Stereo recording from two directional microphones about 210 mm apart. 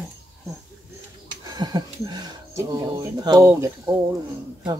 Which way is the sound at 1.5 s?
20° right (ahead or behind).